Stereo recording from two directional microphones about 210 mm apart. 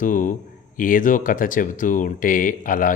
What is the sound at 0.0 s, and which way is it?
Speech, 40° left (ahead or behind).